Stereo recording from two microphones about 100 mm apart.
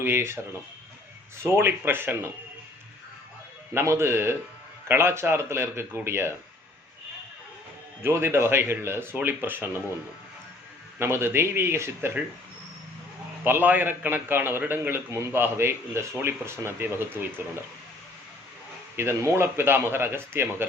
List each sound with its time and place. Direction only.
0.0 s a man's voice: 25° right (ahead or behind)
1.4 s a man's voice: 25° right (ahead or behind)
3.8 s a man's voice: 25° right (ahead or behind)
8.0 s a man's voice: 25° right (ahead or behind)
11.0 s a man's voice: 25° right (ahead or behind)
13.4 s a man's voice: 20° right (ahead or behind)
18.9 s a man's voice: 25° right (ahead or behind)